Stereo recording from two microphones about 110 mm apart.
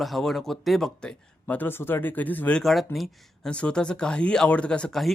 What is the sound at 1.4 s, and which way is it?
Speech, 20° left (ahead or behind).